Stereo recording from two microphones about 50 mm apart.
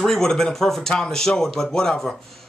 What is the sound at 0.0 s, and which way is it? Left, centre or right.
Speech, centre.